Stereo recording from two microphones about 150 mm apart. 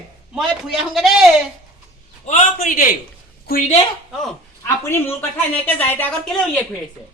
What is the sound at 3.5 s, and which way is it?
Speech, 90° left.